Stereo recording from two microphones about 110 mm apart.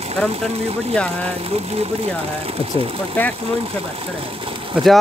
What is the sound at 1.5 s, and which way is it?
Speech, 70° right (ahead or behind).